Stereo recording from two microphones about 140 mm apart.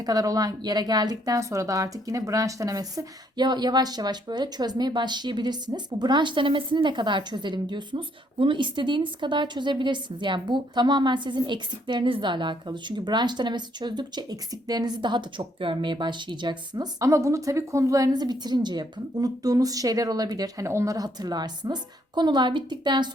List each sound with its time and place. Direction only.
0.0 s speech: 25° right (ahead or behind)